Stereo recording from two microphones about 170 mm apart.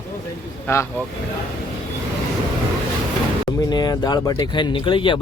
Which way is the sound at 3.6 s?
25° left (ahead or behind).